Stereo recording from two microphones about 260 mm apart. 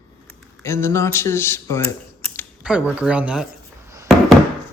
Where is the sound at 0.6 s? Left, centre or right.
Centre.